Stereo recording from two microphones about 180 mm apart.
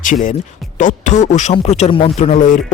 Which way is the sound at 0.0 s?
45° left (ahead or behind).